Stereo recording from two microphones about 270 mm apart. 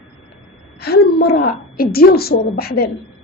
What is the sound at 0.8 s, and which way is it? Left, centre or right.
A woman's voice, left.